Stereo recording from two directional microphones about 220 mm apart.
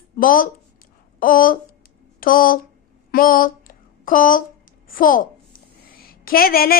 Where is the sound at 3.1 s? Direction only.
40° left (ahead or behind).